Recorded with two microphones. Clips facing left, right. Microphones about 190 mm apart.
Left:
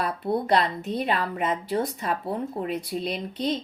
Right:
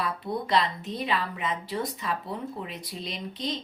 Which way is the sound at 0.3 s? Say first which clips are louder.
Left 4 dB; 55° left (ahead or behind).